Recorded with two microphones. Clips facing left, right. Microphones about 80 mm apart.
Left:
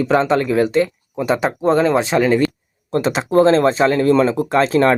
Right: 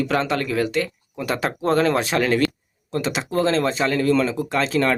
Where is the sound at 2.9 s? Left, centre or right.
Left.